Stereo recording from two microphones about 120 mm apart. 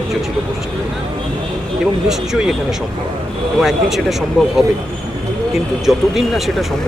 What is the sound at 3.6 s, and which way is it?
Speech, centre (ahead or behind).